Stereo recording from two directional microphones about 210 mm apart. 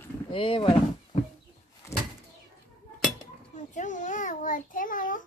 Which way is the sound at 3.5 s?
35° left (ahead or behind).